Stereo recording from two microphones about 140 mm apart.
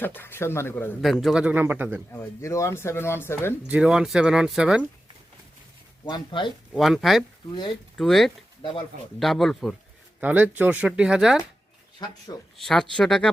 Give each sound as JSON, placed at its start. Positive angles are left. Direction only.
{"t": 0.0, "sound": "speech", "side_deg": 15}
{"t": 1.0, "sound": "a man's voice", "side_deg": 0}
{"t": 2.1, "sound": "speech", "side_deg": 20}
{"t": 3.7, "sound": "speech", "side_deg": -5}
{"t": 6.1, "sound": "speech", "side_deg": 30}
{"t": 6.7, "sound": "speech", "side_deg": 0}
{"t": 10.2, "sound": "a man's voice", "side_deg": -10}
{"t": 12.0, "sound": "speech", "side_deg": 30}
{"t": 12.5, "sound": "speech", "side_deg": 5}